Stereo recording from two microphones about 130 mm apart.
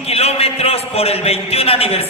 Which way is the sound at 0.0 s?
50° left (ahead or behind).